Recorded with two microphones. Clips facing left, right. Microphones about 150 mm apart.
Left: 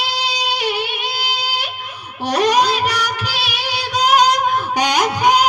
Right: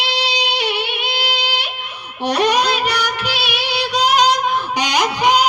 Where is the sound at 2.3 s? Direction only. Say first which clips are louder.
Left 1 dB; 40° left (ahead or behind).